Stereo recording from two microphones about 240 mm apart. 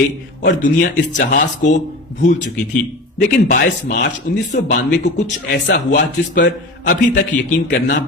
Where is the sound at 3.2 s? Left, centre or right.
Left.